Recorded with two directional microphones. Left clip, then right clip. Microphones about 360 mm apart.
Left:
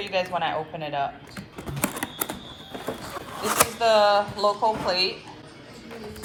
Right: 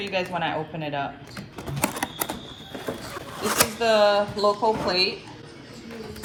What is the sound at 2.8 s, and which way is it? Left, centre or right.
Speech, centre.